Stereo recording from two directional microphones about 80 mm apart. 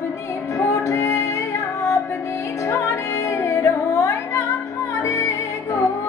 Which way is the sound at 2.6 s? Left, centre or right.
Left.